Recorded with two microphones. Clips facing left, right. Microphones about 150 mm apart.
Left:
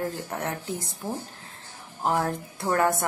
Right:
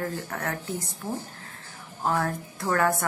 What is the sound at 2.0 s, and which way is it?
A woman's voice, 20° left (ahead or behind).